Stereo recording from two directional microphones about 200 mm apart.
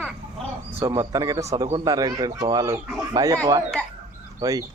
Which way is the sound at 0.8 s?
15° right (ahead or behind).